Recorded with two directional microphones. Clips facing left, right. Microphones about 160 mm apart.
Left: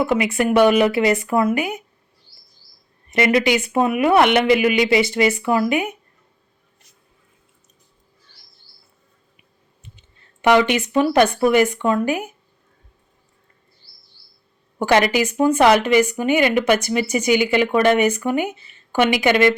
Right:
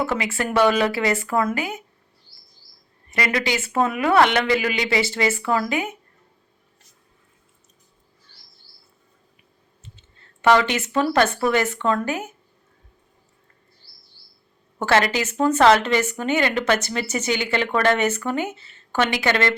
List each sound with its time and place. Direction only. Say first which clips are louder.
0.0 s speech: left 6 dB; 15° left (ahead or behind)
3.1 s speech: left 7 dB; 20° left (ahead or behind)
10.4 s speech: left 2 dB; 15° left (ahead or behind)
14.8 s speech: left 3 dB; 15° left (ahead or behind)